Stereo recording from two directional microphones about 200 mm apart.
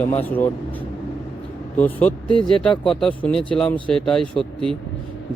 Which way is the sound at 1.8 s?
5° left (ahead or behind).